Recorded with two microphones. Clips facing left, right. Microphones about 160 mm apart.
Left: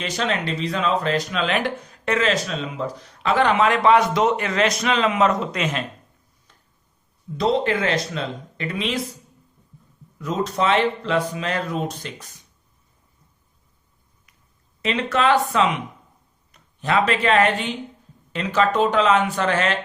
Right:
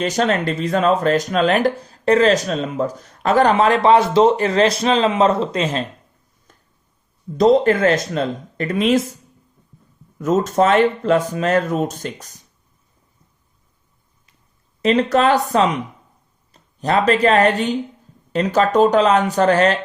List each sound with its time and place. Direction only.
0.0 s speech: 45° right (ahead or behind)
6.5 s a sound: 45° right (ahead or behind)
7.3 s speech: 45° right (ahead or behind)
10.2 s speech: 45° right (ahead or behind)
14.8 s speech: 40° right (ahead or behind)